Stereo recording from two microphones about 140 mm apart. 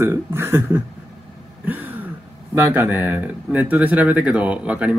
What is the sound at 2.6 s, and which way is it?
Speech, 15° right (ahead or behind).